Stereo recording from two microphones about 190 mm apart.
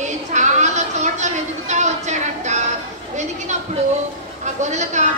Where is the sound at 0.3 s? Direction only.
40° right (ahead or behind).